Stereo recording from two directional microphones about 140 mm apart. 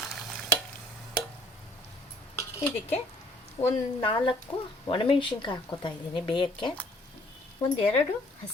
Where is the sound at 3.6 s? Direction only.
40° left (ahead or behind).